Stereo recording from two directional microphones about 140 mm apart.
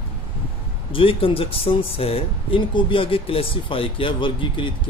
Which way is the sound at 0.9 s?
40° left (ahead or behind).